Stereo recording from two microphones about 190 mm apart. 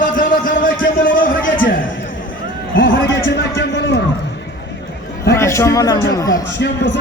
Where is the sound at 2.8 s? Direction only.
75° left (ahead or behind).